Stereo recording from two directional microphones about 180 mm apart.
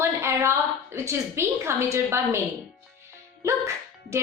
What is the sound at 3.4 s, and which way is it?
Speech, 15° right (ahead or behind).